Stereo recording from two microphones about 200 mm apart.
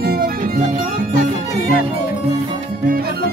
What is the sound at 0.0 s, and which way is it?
Music, 45° right (ahead or behind).